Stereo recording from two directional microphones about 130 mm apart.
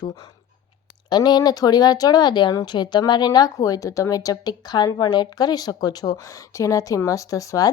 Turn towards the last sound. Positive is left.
turn(degrees=25)  # may be behind; listen again after turning